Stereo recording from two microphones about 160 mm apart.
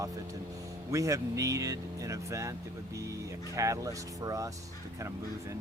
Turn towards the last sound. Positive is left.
turn(degrees=-20)  # may be behind; listen again after turning